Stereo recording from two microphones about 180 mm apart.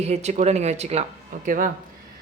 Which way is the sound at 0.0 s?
40° right (ahead or behind).